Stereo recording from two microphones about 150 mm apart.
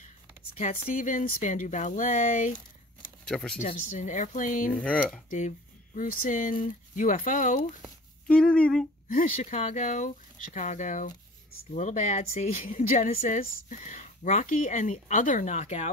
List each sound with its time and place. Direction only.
0.6 s a woman's voice: 60° left (ahead or behind)
3.3 s speech: 5° left (ahead or behind)
3.9 s a woman's voice: 55° left (ahead or behind)
4.7 s speech: 5° left (ahead or behind)
5.9 s a woman's voice: 60° left (ahead or behind)
8.3 s speech: 5° left (ahead or behind)
9.1 s a woman's voice: 55° left (ahead or behind)